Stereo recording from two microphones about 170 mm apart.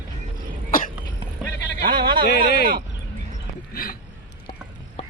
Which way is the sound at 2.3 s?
70° left (ahead or behind).